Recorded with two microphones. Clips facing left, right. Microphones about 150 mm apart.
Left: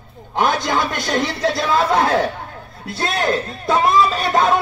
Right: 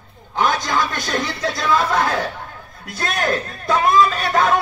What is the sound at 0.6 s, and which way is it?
Speech, 25° left (ahead or behind).